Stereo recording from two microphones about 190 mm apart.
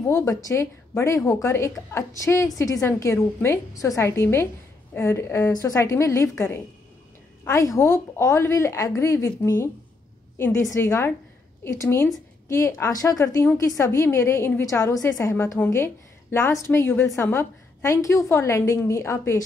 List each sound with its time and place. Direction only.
0.0 s a woman's voice: 15° left (ahead or behind)